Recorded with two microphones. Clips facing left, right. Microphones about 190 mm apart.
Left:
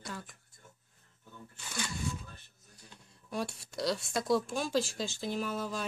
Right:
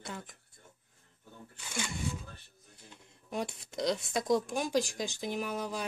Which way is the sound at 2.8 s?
20° right (ahead or behind).